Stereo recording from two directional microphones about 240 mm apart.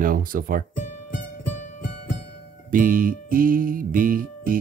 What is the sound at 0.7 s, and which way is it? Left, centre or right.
Music, left.